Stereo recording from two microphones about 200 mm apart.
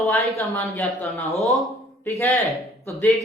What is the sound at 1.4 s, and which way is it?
Speech, centre (ahead or behind).